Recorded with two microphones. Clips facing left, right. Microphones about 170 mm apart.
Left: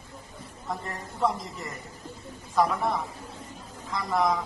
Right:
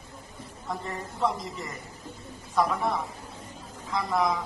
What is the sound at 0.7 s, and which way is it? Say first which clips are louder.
A man's voice: right 1 dB; centre (ahead or behind).